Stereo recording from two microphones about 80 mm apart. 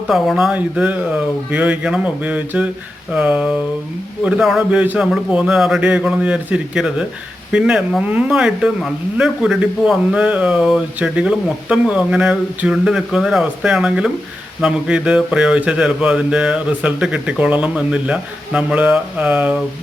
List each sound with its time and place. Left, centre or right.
0.1 s speech: centre
0.8 s speech: centre
4.7 s a man's voice: centre
5.3 s speech: centre